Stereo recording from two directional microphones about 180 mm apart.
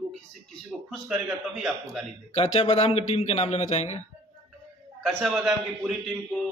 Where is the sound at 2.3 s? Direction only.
35° left (ahead or behind).